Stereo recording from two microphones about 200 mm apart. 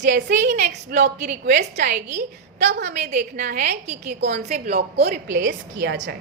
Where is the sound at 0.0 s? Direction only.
60° right (ahead or behind).